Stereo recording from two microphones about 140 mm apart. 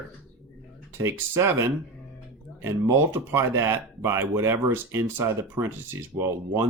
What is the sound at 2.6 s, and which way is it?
Speech, 15° right (ahead or behind).